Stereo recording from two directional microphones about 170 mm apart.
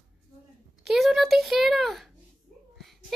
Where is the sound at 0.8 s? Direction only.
Centre (ahead or behind).